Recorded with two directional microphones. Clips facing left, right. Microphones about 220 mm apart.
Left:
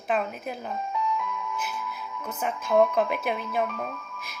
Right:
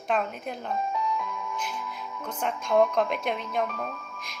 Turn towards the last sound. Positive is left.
turn(degrees=5)  # may be behind; listen again after turning